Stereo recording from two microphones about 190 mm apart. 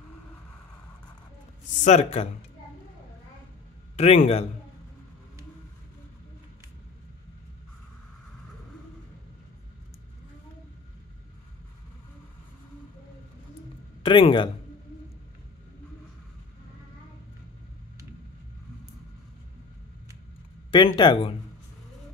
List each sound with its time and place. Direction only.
1.9 s speech: 35° left (ahead or behind)
3.9 s a man's voice: 35° left (ahead or behind)
14.0 s speech: 25° left (ahead or behind)
20.7 s speech: 25° left (ahead or behind)